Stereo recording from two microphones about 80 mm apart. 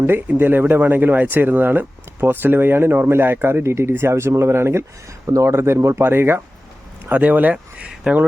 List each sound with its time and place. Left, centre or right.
0.0 s speech: right; by 8.2 s centre